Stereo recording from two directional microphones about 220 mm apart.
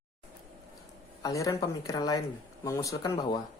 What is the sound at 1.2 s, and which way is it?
Speech, 15° left (ahead or behind).